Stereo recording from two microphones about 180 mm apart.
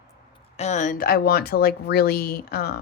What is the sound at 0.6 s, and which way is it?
Speech, 40° left (ahead or behind).